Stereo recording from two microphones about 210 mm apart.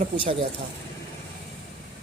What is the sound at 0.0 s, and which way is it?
Speech, 30° right (ahead or behind).